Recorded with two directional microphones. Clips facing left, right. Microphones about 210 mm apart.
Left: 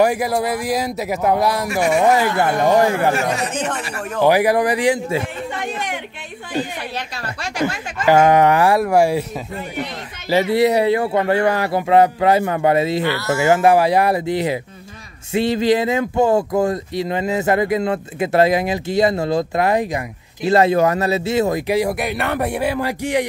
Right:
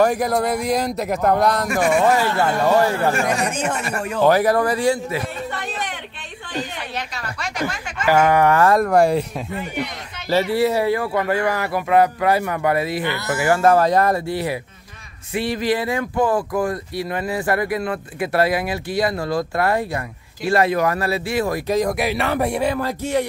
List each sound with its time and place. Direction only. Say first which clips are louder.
0.0 s speech: left 1 dB; 5° left (ahead or behind)
3.5 s speech: even; 10° right (ahead or behind)
4.2 s speech: left 1 dB; 10° left (ahead or behind)
5.6 s a sound: left 3 dB; 10° left (ahead or behind)
7.5 s speech: left 5 dB; 25° left (ahead or behind); by 9.2 s 5° left (ahead or behind)
10.3 s speech: left 3 dB; 20° left (ahead or behind)
13.0 s speech: left 4 dB; 20° right (ahead or behind)
13.4 s speech: left 1 dB; 15° left (ahead or behind)
21.9 s speech: right 1 dB; centre (ahead or behind)